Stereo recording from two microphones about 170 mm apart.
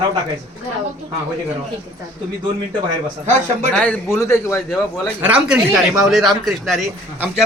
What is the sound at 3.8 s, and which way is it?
Speech, 10° left (ahead or behind).